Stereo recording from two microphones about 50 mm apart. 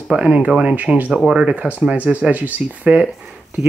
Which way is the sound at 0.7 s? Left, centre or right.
Right.